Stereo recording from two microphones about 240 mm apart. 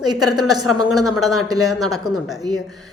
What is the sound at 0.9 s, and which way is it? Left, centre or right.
Speech, centre.